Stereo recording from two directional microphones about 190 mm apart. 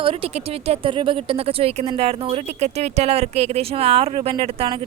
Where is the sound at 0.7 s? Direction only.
25° right (ahead or behind).